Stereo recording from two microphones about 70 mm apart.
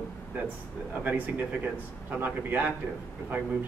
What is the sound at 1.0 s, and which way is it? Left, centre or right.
Speech, right.